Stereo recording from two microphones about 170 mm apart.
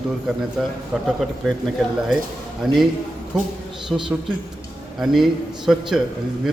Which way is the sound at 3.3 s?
5° right (ahead or behind).